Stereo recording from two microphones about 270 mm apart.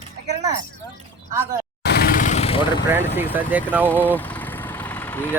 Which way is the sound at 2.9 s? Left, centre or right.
Centre.